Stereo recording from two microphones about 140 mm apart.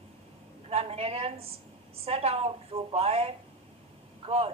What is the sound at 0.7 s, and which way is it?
A woman's voice, 45° right (ahead or behind).